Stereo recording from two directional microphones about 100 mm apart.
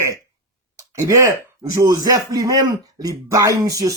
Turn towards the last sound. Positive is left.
turn(degrees=-35)  # may be behind; listen again after turning